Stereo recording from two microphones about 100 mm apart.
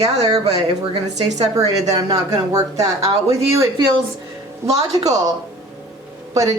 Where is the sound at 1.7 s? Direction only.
35° right (ahead or behind).